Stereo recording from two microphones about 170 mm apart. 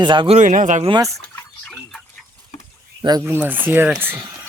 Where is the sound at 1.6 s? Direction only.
5° left (ahead or behind).